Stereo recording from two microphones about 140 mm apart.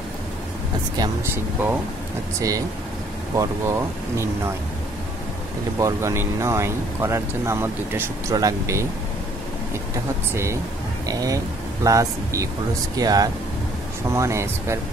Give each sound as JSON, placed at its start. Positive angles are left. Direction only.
{"t": 1.3, "sound": "speech", "side_deg": -15}
{"t": 3.3, "sound": "speech", "side_deg": -20}
{"t": 5.8, "sound": "speech", "side_deg": -20}
{"t": 10.3, "sound": "speech", "side_deg": -20}